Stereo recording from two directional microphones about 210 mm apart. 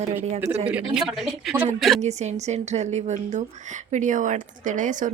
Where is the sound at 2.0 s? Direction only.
30° right (ahead or behind).